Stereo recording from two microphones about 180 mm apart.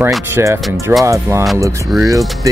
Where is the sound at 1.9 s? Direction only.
Centre (ahead or behind).